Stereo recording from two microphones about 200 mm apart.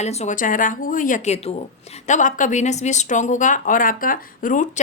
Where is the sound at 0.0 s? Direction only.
35° left (ahead or behind).